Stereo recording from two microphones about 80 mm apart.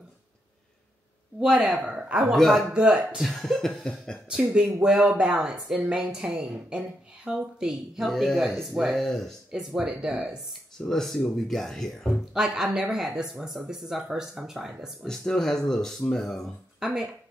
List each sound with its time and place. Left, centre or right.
1.4 s a woman's voice: centre
1.8 s a sound: centre
2.1 s speech: centre
2.7 s speech: centre
4.3 s a woman's voice: centre
9.8 s a woman's voice: centre
10.9 s speech: centre
15.0 s speech: centre